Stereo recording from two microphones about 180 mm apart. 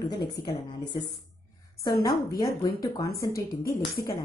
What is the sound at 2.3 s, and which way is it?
A woman's voice, 20° left (ahead or behind).